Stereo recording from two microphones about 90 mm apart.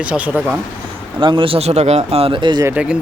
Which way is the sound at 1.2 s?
70° right (ahead or behind).